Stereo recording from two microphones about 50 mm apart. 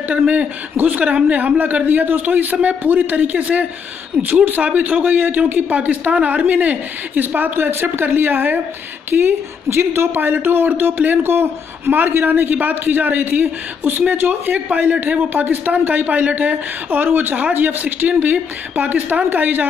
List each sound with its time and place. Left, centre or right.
0.1 s a man's voice: right
0.7 s a man's voice: right
9.1 s speech: right
14.7 s a man's voice: right